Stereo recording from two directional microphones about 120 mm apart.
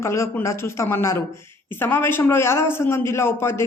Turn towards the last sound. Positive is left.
turn(degrees=20)  # may be behind; listen again after turning